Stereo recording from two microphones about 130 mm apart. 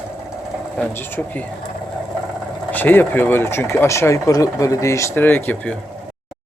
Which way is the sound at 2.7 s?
15° left (ahead or behind).